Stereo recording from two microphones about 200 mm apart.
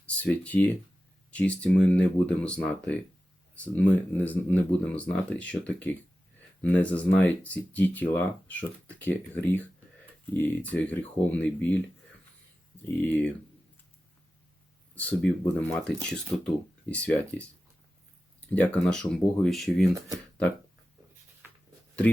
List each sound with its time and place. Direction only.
0.1 s speech: 5° left (ahead or behind)
13.0 s speech: 10° left (ahead or behind)
14.9 s speech: 10° left (ahead or behind)